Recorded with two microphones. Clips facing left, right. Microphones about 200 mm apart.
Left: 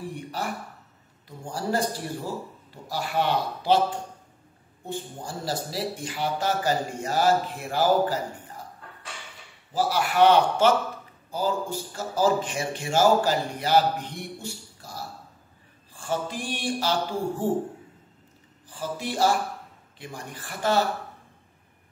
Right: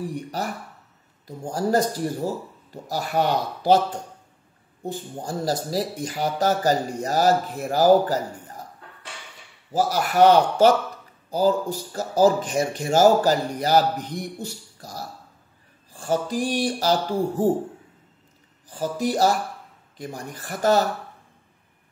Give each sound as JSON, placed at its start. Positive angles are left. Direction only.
{"t": 0.0, "sound": "speech", "side_deg": -40}
{"t": 9.7, "sound": "speech", "side_deg": -40}
{"t": 18.7, "sound": "speech", "side_deg": -40}